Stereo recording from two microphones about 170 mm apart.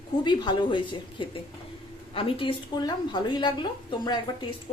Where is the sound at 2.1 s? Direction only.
30° left (ahead or behind).